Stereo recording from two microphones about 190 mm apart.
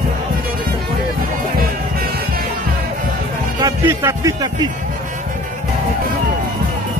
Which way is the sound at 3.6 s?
15° right (ahead or behind).